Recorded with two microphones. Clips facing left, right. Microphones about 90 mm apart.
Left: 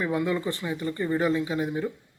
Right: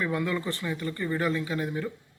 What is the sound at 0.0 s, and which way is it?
Speech, 20° left (ahead or behind).